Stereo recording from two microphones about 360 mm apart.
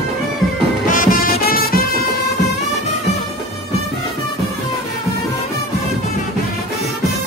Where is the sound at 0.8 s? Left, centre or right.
Left.